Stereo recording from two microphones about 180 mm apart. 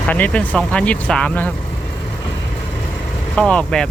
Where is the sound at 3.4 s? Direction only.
5° left (ahead or behind).